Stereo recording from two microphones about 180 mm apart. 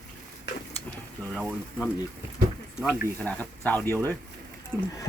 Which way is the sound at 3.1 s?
10° left (ahead or behind).